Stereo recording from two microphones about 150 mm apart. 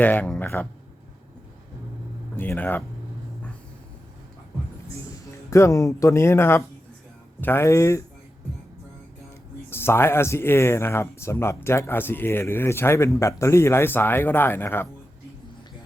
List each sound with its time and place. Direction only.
0.0 s speech: 10° left (ahead or behind)
2.3 s speech: 10° left (ahead or behind)
5.5 s speech: 20° left (ahead or behind)
9.6 s speech: 15° left (ahead or behind)